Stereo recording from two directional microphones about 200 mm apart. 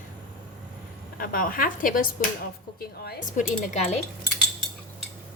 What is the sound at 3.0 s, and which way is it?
Speech, 35° left (ahead or behind).